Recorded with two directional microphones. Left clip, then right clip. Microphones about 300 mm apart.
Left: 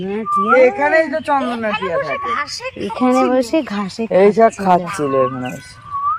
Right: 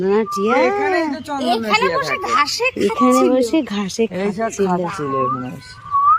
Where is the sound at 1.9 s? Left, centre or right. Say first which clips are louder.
Right 2 dB; right.